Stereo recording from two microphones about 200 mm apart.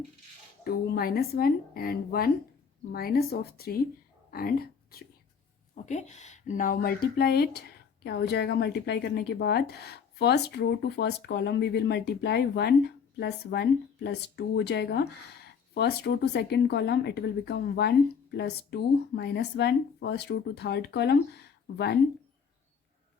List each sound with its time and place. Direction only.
0.6 s a woman's voice: 50° left (ahead or behind)
5.7 s speech: 35° left (ahead or behind); by 21.9 s 55° left (ahead or behind)